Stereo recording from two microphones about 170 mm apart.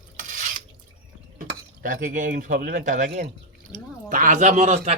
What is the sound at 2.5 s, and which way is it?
Speech, 70° right (ahead or behind).